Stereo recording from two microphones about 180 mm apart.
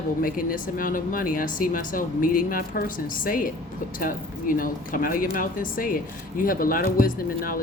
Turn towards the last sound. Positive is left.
turn(degrees=50)  # may be behind; listen again after turning